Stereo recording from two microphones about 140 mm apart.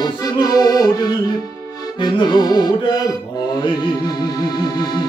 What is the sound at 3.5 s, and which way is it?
Speech, 30° left (ahead or behind).